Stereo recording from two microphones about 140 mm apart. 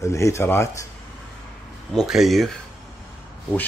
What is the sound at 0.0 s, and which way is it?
Speech, 20° left (ahead or behind).